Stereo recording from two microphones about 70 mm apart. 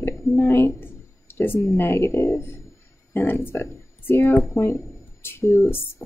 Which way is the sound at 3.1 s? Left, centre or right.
Left.